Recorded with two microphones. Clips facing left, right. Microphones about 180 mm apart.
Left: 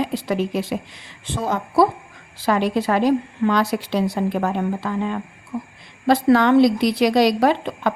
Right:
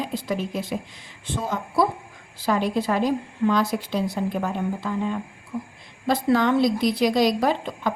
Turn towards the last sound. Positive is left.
turn(degrees=70)  # may be behind; listen again after turning